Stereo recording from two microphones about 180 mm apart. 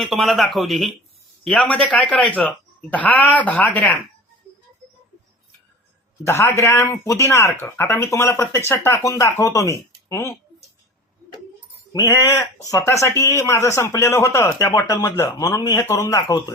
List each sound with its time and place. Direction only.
0.0 s speech: centre (ahead or behind)
6.2 s speech: 15° left (ahead or behind)
11.9 s speech: 15° left (ahead or behind)